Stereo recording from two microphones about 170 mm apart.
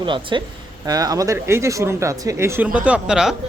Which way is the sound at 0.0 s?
30° right (ahead or behind).